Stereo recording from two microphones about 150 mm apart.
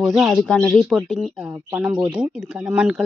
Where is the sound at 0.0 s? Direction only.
Centre (ahead or behind).